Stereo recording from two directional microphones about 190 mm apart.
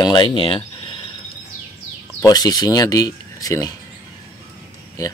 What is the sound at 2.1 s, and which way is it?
Speech, 20° left (ahead or behind).